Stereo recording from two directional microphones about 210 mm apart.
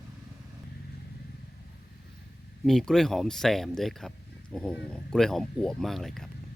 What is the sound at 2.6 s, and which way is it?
Speech, centre (ahead or behind).